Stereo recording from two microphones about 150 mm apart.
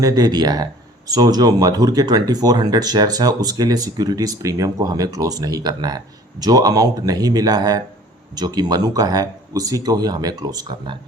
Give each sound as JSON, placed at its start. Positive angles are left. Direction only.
{"t": 0.0, "sound": "speech", "side_deg": -25}